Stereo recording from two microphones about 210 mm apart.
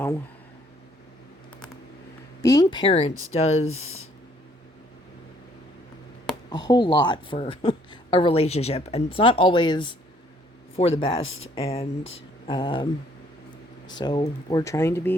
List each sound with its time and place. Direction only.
2.4 s speech: 15° left (ahead or behind)
3.7 s speech: 80° left
6.5 s speech: 20° left (ahead or behind)